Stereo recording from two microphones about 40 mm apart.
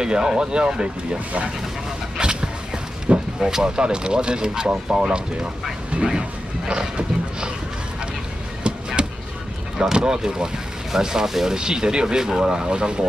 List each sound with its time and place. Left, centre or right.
0.0 s speech: centre
2.1 s a sound: right
3.3 s speech: centre
7.0 s horse: right
9.0 s a sound: right
9.9 s speech: centre